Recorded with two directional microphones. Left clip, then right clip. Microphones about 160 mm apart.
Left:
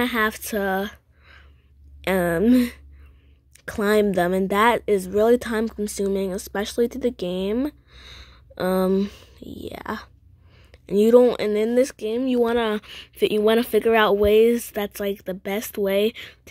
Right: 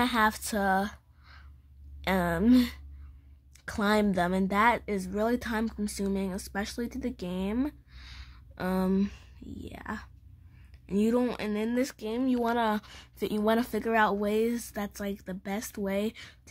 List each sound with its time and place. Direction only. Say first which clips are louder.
0.0 s a woman's voice: left 4 dB; 10° left (ahead or behind)